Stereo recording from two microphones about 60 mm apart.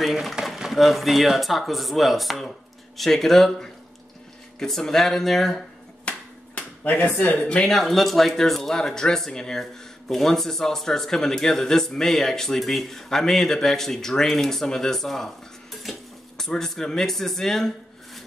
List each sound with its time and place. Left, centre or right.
0.0 s speech: centre
6.0 s a sound: left
7.1 s speech: left
7.4 s speech: centre
7.7 s speech: centre